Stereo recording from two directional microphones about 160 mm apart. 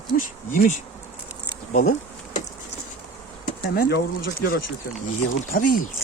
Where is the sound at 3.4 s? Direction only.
65° left (ahead or behind).